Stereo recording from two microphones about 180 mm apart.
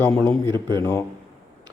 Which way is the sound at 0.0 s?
10° left (ahead or behind).